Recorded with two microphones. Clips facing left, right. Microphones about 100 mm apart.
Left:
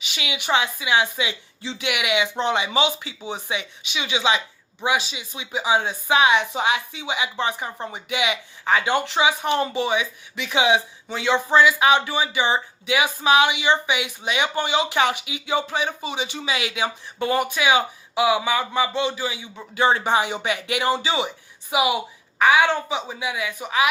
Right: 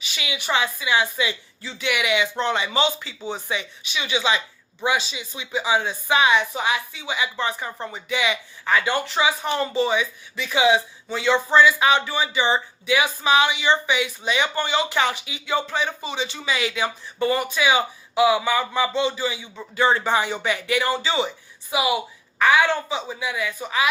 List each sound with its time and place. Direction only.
0.1 s a woman's voice: 20° left (ahead or behind)